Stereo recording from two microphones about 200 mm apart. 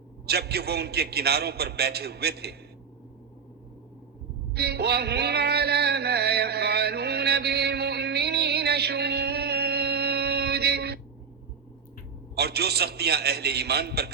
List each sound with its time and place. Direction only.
0.3 s a man's voice: 55° right (ahead or behind)
4.5 s music: 55° right (ahead or behind)
12.4 s a man's voice: 55° right (ahead or behind)